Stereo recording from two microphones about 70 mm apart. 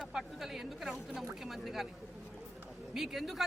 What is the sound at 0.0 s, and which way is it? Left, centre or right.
A woman's voice, centre.